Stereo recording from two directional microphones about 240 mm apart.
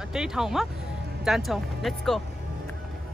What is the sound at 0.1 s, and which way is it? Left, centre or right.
Speech, centre.